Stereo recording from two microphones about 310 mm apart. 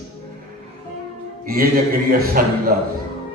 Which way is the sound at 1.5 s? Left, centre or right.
Right.